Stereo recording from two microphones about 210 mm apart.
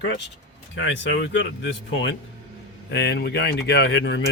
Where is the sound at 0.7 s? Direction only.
60° left (ahead or behind).